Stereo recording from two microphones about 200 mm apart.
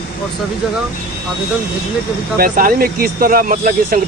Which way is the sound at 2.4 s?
45° right (ahead or behind).